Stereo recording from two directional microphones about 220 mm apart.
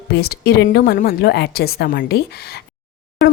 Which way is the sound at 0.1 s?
45° left (ahead or behind).